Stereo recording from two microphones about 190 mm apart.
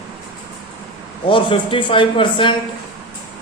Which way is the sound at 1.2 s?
25° left (ahead or behind).